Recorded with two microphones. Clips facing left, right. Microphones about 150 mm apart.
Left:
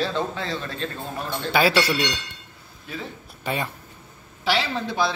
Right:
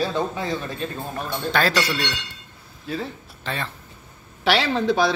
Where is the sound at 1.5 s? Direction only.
10° left (ahead or behind).